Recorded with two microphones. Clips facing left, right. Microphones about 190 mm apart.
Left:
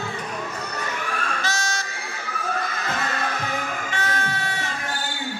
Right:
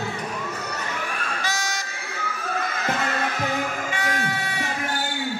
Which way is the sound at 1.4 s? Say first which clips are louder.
Left 1 dB; 15° right (ahead or behind).